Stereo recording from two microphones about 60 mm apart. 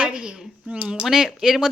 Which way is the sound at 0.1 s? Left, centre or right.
Centre.